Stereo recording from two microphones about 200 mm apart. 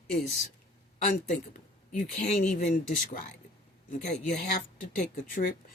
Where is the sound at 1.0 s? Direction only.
45° left (ahead or behind).